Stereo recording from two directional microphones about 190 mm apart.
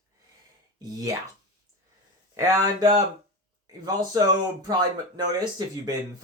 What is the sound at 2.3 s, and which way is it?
Speech, 20° right (ahead or behind).